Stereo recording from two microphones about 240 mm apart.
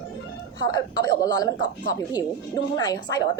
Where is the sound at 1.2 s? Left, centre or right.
Centre.